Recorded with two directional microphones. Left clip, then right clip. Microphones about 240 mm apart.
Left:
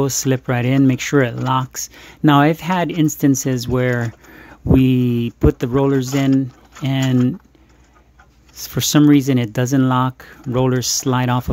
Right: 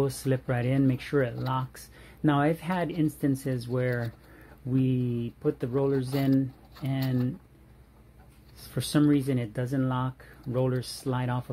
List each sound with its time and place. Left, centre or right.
0.0 s speech: left
8.7 s speech: left